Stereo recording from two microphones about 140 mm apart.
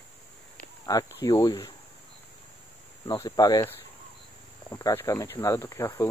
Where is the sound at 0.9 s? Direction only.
25° left (ahead or behind).